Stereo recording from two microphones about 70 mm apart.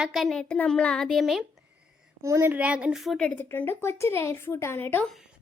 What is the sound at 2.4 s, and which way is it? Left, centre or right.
Speech, right.